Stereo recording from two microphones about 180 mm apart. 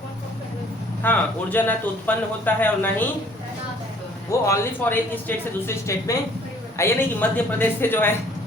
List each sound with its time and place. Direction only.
1.0 s speech: 10° left (ahead or behind)
4.3 s speech: 15° left (ahead or behind)